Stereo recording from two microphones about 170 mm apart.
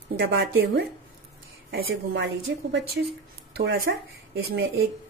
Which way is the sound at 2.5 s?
90° right.